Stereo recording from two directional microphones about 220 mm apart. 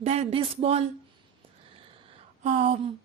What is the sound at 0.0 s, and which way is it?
Speech, 30° right (ahead or behind).